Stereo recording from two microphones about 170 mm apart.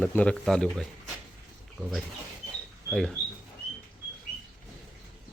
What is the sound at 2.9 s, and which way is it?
Speech, 5° left (ahead or behind).